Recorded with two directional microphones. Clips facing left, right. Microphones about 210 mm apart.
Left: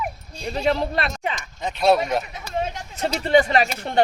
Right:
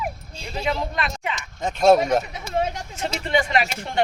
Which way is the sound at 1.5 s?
45° right (ahead or behind).